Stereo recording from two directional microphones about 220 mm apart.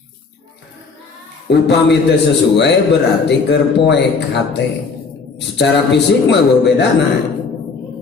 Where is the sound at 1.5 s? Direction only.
50° left (ahead or behind).